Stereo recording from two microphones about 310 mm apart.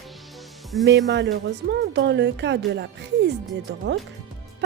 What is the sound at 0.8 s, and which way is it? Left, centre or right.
Music, right.